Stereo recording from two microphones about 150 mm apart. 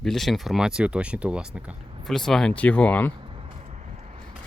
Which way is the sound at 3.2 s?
40° right (ahead or behind).